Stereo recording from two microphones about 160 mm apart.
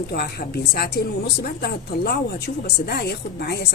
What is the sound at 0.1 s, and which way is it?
Speech, 75° left (ahead or behind).